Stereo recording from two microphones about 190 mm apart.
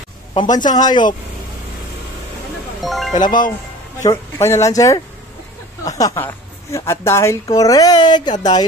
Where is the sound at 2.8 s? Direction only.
Centre (ahead or behind).